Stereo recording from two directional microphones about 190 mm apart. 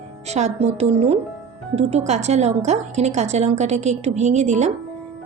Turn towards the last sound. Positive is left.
turn(degrees=-35)  # may be behind; listen again after turning